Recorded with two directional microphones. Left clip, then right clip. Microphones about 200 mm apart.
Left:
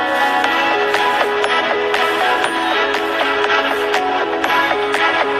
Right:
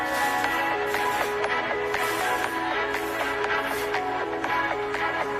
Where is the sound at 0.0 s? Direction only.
35° left (ahead or behind).